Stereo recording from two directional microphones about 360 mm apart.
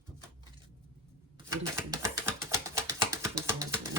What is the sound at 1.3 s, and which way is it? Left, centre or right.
Typewriter, centre.